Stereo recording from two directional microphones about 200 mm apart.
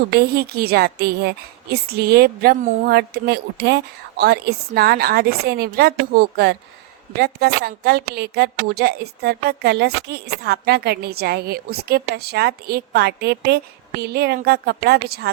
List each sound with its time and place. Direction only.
0.1 s a woman's voice: 50° right (ahead or behind)